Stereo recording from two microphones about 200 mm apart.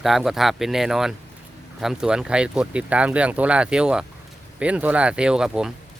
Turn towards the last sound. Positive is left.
turn(degrees=-5)  # may be behind; listen again after turning